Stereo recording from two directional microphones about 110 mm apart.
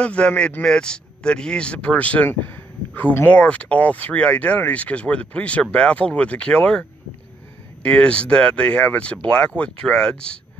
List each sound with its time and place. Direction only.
0.0 s speech: 10° left (ahead or behind)